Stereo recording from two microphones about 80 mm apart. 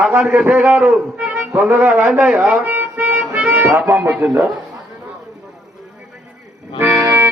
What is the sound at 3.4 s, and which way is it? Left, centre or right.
Speech, right.